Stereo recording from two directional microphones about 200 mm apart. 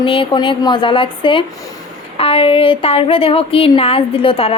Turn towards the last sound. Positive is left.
turn(degrees=25)  # may be behind; listen again after turning